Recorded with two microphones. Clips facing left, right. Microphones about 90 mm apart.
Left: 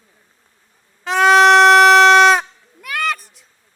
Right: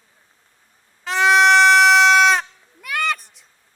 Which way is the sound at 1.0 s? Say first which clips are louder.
Left 4 dB; centre (ahead or behind).